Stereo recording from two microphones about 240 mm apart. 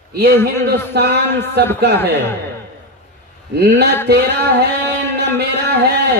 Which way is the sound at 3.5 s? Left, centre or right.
Right.